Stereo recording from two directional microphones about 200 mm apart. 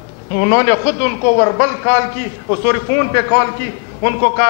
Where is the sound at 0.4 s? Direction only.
15° left (ahead or behind).